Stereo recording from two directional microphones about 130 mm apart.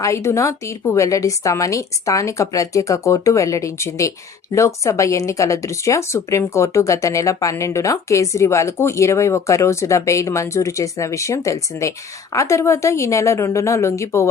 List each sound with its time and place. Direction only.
0.0 s speech: 20° left (ahead or behind)